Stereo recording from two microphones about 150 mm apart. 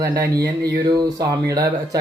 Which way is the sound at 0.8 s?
25° right (ahead or behind).